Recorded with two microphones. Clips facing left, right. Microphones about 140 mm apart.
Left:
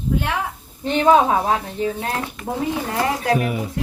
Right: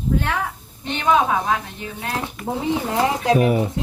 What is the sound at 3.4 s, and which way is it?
Speech, 40° right (ahead or behind).